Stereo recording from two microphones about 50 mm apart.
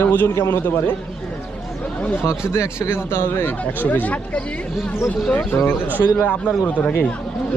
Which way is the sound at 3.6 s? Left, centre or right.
Left.